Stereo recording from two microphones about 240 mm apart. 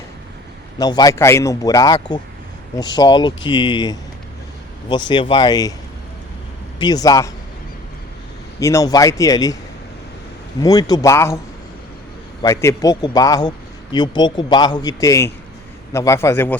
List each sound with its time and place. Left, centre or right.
0.8 s a man's voice: centre
6.7 s a man's voice: centre
8.5 s a man's voice: centre
10.6 s a man's voice: centre
12.4 s a man's voice: centre